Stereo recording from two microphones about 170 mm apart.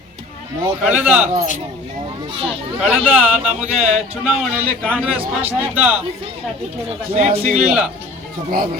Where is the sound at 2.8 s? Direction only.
Centre (ahead or behind).